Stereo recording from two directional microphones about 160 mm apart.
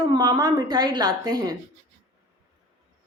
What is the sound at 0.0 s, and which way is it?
A woman's voice, 25° right (ahead or behind).